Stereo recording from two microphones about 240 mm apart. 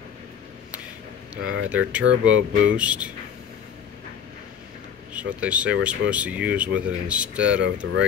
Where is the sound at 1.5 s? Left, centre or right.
Right.